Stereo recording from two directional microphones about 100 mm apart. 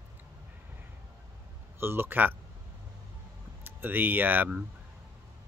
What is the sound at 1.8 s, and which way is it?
Speech, 25° right (ahead or behind).